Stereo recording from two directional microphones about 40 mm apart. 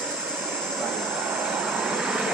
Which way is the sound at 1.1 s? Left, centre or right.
Right.